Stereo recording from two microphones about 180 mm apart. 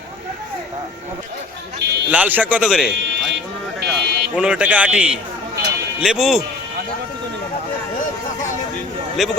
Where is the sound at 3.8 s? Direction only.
60° right (ahead or behind).